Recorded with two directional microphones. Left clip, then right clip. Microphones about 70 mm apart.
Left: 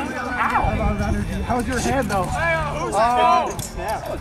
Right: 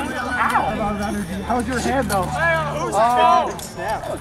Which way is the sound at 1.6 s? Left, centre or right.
Centre.